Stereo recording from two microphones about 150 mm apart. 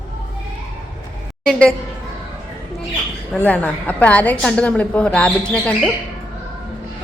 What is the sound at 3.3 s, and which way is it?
A woman's voice, 10° left (ahead or behind).